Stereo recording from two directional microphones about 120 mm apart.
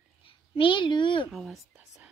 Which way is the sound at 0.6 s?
45° left (ahead or behind).